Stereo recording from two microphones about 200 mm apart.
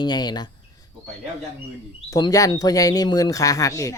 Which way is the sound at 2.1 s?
20° left (ahead or behind).